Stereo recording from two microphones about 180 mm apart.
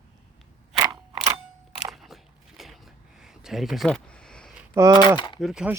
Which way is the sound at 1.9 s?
Centre (ahead or behind).